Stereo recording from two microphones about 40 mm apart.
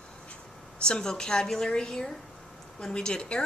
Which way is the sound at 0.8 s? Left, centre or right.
Left.